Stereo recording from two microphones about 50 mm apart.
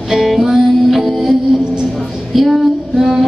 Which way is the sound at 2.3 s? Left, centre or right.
Centre.